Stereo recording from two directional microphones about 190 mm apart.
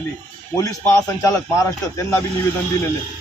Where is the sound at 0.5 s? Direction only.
15° left (ahead or behind).